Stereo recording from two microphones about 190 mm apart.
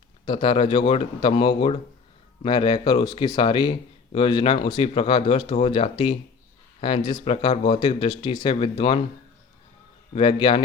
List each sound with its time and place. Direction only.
0.3 s speech: 25° left (ahead or behind)
10.1 s speech: 30° left (ahead or behind)